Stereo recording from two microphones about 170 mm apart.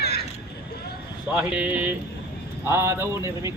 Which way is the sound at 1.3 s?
5° right (ahead or behind).